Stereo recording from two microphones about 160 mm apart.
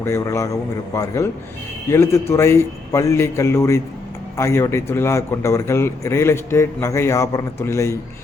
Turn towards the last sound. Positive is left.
turn(degrees=20)  # may be behind; listen again after turning